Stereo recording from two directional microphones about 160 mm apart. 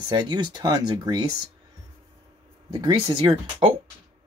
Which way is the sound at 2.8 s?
25° right (ahead or behind).